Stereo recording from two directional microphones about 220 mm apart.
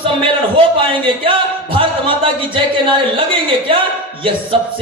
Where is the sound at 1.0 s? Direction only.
25° right (ahead or behind).